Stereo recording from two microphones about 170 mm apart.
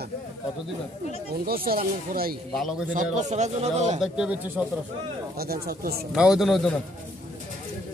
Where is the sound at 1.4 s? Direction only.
60° right (ahead or behind).